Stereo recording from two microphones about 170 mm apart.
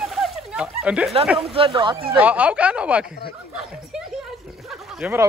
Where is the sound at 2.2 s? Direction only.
10° right (ahead or behind).